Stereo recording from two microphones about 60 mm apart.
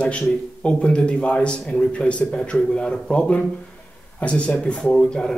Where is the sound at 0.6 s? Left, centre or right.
Centre.